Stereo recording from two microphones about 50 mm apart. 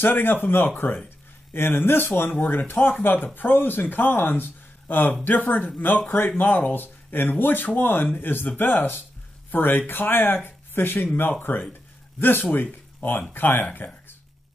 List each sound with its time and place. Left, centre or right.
0.0 s speech: left